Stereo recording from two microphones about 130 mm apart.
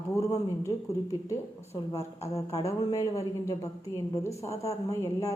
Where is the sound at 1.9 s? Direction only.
20° left (ahead or behind).